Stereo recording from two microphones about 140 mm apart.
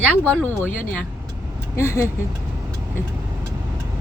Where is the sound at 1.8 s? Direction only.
20° left (ahead or behind).